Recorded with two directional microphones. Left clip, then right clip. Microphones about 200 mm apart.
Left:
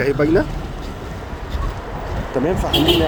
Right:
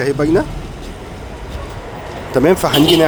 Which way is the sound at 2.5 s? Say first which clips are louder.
Right 5 dB; 40° right (ahead or behind).